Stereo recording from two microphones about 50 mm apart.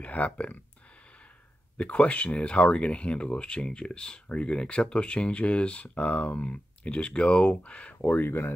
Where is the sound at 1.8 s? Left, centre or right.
Left.